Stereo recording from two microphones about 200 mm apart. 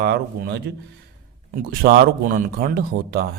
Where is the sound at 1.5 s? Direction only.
45° right (ahead or behind).